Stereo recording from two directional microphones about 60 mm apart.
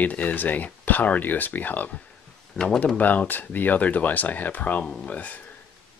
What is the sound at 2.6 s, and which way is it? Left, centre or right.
Speech, centre.